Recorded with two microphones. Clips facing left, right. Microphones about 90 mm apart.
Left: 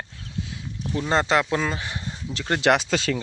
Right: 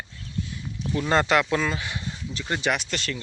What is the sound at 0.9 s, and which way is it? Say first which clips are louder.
Speech: even; 25° left (ahead or behind).